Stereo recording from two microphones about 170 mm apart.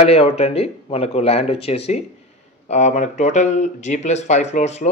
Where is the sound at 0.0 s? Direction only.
35° left (ahead or behind).